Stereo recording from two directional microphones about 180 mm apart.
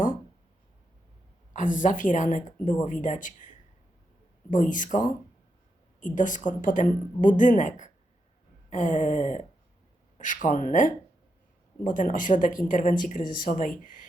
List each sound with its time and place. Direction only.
1.5 s speech: 45° left (ahead or behind)